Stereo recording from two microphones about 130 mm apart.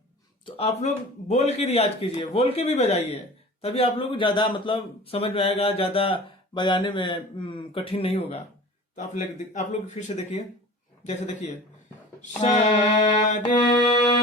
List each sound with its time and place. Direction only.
0.4 s a man's voice: 50° left (ahead or behind)
9.0 s a man's voice: 70° left (ahead or behind)
13.6 s music: 35° left (ahead or behind)